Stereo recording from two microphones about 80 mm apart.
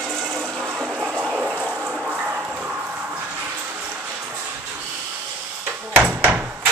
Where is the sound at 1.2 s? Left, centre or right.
Centre.